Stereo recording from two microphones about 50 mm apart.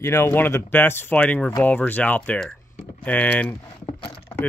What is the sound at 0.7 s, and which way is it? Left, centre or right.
Speech, left.